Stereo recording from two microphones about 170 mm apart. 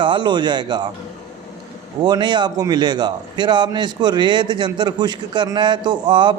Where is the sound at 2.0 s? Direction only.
25° right (ahead or behind).